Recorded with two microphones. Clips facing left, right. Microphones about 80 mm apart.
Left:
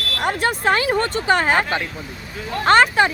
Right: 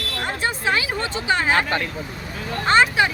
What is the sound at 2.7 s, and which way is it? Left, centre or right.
Speech, left.